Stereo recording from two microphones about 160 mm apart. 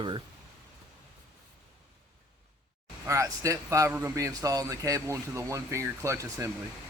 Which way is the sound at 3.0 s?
20° right (ahead or behind).